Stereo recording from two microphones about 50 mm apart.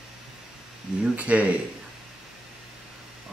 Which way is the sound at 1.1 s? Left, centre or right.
Right.